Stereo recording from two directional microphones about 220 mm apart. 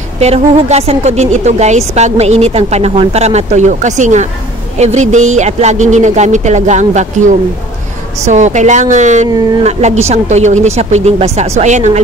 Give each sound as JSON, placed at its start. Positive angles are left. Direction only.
{"t": 0.2, "sound": "a woman's voice", "side_deg": -30}
{"t": 8.3, "sound": "a woman's voice", "side_deg": -35}